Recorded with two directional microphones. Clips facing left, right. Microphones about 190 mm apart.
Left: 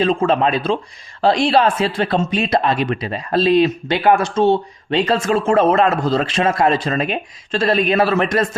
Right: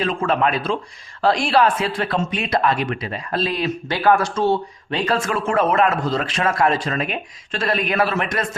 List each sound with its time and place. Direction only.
0.0 s speech: 30° left (ahead or behind)